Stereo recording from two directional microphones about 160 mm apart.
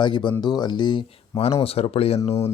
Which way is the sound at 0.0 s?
30° left (ahead or behind).